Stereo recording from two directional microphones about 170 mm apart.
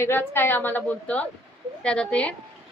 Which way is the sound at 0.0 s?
15° left (ahead or behind).